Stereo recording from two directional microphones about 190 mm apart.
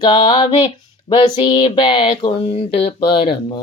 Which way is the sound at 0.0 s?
25° left (ahead or behind).